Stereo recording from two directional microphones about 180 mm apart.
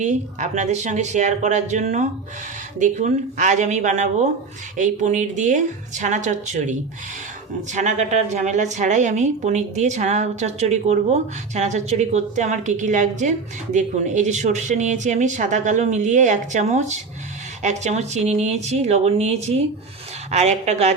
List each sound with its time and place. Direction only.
0.0 s a woman's voice: 40° right (ahead or behind)